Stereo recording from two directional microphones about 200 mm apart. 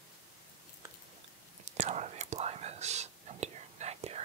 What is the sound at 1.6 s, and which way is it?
Whispering, 35° right (ahead or behind).